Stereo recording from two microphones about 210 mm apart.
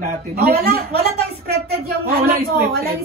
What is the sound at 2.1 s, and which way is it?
Speech, 50° right (ahead or behind).